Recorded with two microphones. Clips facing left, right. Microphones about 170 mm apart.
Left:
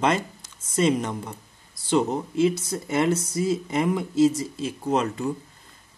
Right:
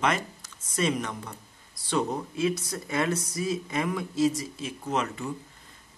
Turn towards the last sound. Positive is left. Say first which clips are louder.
# left 5 dB
turn(degrees=35)  # may be behind; listen again after turning